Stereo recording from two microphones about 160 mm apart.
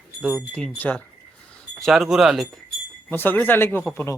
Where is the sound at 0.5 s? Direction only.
10° left (ahead or behind).